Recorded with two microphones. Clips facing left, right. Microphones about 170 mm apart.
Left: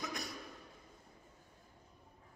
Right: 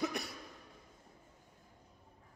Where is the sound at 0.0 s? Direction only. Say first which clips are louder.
Right 6 dB; 65° right (ahead or behind).